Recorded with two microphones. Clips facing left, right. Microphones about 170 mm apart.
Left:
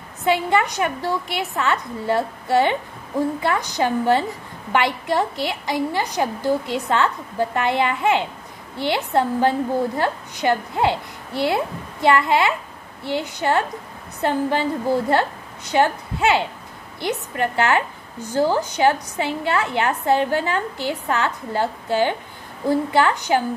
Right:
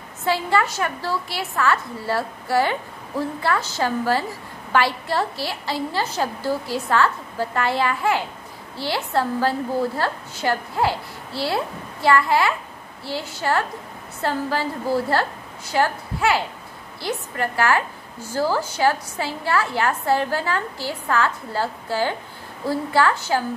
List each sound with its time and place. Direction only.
0.2 s a woman's voice: 20° left (ahead or behind)